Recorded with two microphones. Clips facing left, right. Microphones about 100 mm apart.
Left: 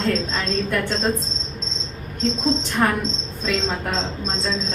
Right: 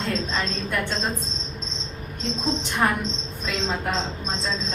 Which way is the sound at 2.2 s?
15° right (ahead or behind).